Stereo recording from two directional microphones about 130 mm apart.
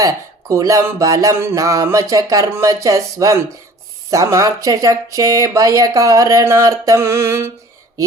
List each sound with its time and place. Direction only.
0.0 s speech: 25° right (ahead or behind)